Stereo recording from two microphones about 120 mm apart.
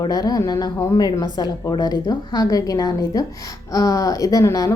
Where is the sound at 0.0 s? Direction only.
30° left (ahead or behind).